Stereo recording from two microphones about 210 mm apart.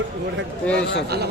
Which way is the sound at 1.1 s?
50° right (ahead or behind).